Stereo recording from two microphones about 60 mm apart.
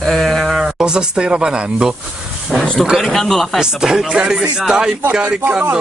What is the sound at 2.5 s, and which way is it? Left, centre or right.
Speech, centre.